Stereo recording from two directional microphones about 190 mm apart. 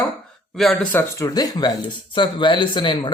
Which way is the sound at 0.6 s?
Centre (ahead or behind).